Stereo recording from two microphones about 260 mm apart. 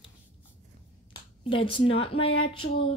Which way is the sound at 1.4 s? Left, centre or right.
Left.